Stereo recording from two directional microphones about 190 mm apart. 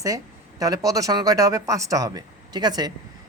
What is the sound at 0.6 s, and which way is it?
Speech, 20° right (ahead or behind).